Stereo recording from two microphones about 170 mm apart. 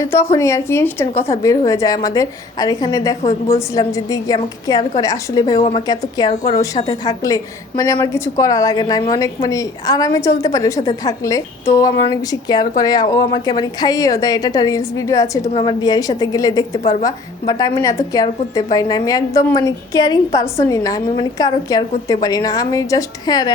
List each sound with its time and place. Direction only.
0.0 s a woman's voice: 15° left (ahead or behind)